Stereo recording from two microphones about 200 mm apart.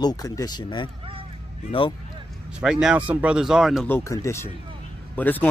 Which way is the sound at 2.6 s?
5° right (ahead or behind).